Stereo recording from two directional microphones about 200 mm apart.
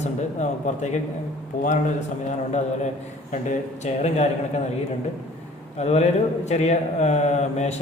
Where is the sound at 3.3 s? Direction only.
35° left (ahead or behind).